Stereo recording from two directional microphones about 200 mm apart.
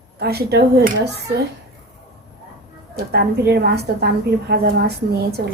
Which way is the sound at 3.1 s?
55° right (ahead or behind).